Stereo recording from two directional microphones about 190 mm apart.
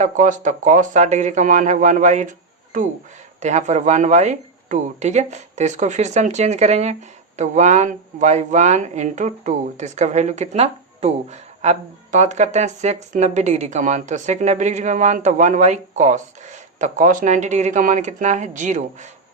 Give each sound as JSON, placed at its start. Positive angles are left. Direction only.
{"t": 0.0, "sound": "speech", "side_deg": -40}
{"t": 3.4, "sound": "speech", "side_deg": -35}